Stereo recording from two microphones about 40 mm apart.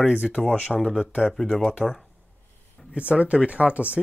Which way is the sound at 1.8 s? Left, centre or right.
Right.